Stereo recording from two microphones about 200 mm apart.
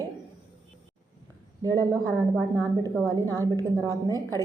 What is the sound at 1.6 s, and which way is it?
A woman's voice, 15° right (ahead or behind).